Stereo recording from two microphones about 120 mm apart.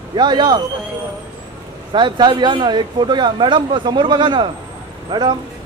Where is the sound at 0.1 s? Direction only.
40° right (ahead or behind).